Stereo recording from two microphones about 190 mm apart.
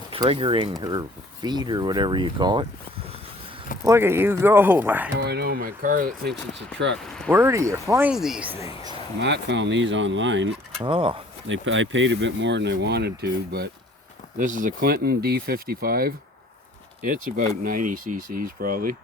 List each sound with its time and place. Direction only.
0.1 s speech: 30° right (ahead or behind)
3.8 s speech: 15° right (ahead or behind)
5.1 s speech: 60° right (ahead or behind)
6.9 s speech: 5° left (ahead or behind)
7.3 s speech: 15° right (ahead or behind)
9.2 s speech: 65° right (ahead or behind)
10.8 s speech: 25° right (ahead or behind)
11.4 s speech: 85° right; by 13.7 s 55° right (ahead or behind)
14.3 s speech: 45° right (ahead or behind)